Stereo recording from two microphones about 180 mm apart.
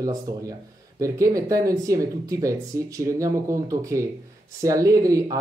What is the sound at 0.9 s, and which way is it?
Speech, 15° right (ahead or behind).